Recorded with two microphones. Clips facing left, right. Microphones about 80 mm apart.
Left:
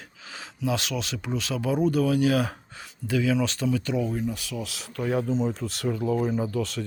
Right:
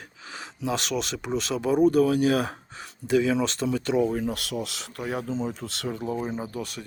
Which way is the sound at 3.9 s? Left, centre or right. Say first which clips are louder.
Right 3 dB; right.